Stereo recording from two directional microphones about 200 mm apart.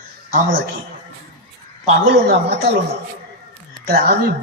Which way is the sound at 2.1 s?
55° right (ahead or behind).